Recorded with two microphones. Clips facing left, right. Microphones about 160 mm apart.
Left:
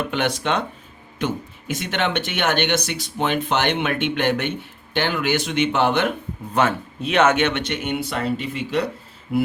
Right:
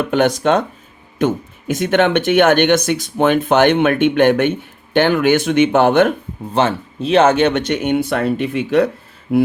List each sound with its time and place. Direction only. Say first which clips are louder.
0.1 s speech: right 8 dB; 45° right (ahead or behind)
6.5 s speech: right 4 dB; 30° right (ahead or behind); by 8.9 s 55° right (ahead or behind)